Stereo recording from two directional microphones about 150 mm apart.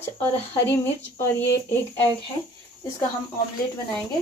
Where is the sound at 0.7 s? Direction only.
15° left (ahead or behind).